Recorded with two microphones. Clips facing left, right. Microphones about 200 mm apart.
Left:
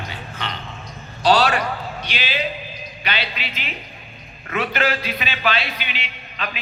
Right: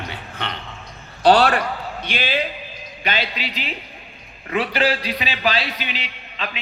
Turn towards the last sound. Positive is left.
turn(degrees=-35)  # may be behind; listen again after turning